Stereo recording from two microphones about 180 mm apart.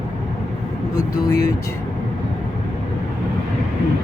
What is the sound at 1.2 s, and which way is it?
Speech, 15° left (ahead or behind).